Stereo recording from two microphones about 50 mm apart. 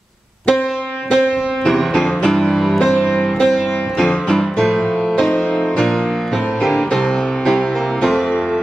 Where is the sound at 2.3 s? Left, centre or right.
Centre.